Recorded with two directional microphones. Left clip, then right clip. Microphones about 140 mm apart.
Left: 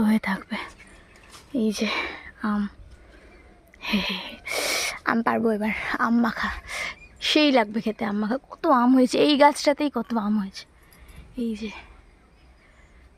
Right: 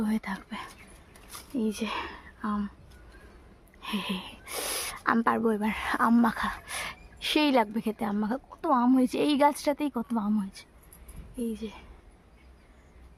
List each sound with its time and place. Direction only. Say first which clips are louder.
0.0 s speech: left 8 dB; 35° left (ahead or behind)
3.8 s a sound: left 7 dB; 30° left (ahead or behind)
5.2 s speech: left 3 dB; 10° left (ahead or behind)
8.4 s a woman's voice: left 6 dB; 30° left (ahead or behind)